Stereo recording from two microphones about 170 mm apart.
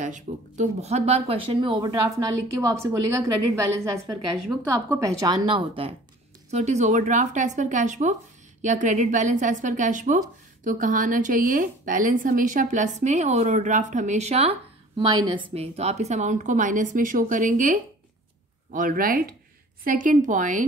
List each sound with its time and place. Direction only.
0.0 s speech: 45° right (ahead or behind); by 3.3 s 15° right (ahead or behind)
4.8 s speech: 15° right (ahead or behind)
6.5 s speech: 45° right (ahead or behind)